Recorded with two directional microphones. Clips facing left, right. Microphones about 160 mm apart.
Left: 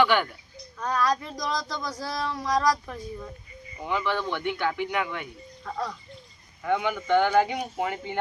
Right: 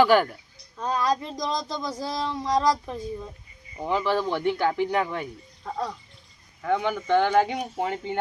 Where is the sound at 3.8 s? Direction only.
35° right (ahead or behind).